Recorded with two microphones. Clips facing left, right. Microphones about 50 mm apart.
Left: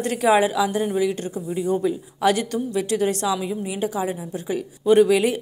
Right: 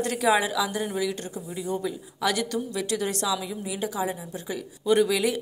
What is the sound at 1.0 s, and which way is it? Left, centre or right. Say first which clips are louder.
A woman's voice: left 6 dB; left.